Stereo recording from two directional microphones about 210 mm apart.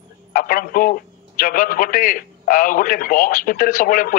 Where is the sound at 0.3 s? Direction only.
40° left (ahead or behind).